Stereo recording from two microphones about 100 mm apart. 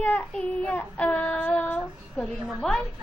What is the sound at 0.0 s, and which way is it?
Child singing, 15° left (ahead or behind).